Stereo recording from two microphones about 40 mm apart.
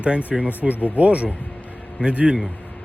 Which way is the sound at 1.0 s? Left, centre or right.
Right.